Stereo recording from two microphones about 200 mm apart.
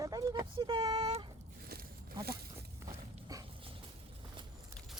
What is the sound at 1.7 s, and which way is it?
Zipper, 50° right (ahead or behind).